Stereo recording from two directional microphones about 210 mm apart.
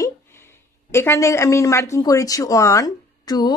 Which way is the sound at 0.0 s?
10° left (ahead or behind).